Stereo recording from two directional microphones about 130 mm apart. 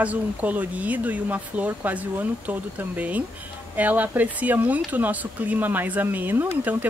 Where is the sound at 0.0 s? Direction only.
10° right (ahead or behind).